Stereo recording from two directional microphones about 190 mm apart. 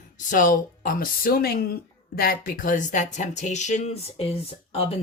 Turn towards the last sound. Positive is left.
turn(degrees=30)  # may be behind; listen again after turning